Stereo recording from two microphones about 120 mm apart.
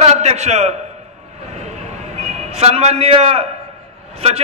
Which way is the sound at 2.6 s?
60° right (ahead or behind).